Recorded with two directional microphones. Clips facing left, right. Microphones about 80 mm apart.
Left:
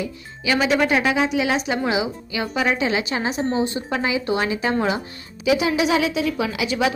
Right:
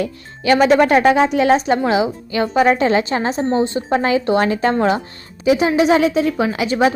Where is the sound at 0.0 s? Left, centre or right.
Right.